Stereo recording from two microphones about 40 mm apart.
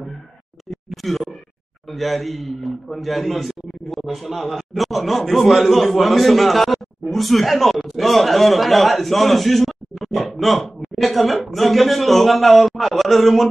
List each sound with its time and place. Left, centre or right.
1.9 s a man's voice: centre